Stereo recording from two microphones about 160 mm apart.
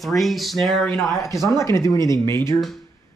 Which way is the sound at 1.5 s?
20° left (ahead or behind).